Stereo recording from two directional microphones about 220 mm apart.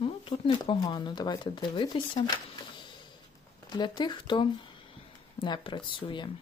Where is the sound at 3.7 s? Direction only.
20° left (ahead or behind).